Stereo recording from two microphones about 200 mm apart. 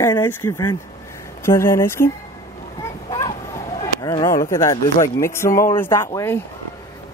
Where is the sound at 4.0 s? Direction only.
20° left (ahead or behind).